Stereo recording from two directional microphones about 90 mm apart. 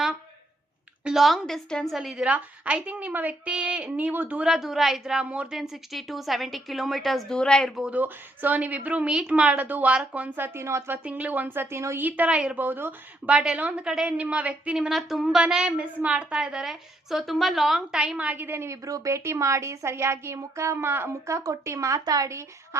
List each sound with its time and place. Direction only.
1.0 s a woman's voice: centre (ahead or behind)
7.8 s a woman's voice: 15° right (ahead or behind); by 12.0 s 30° right (ahead or behind)
12.0 s a woman's voice: 20° right (ahead or behind)
18.3 s a woman's voice: 20° right (ahead or behind)